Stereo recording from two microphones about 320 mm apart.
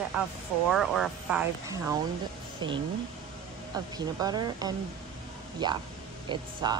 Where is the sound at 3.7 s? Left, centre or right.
Centre.